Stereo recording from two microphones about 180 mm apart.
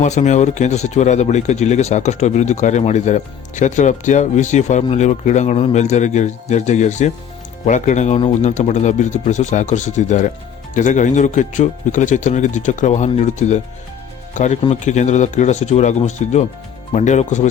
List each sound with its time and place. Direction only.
0.0 s speech: 40° left (ahead or behind)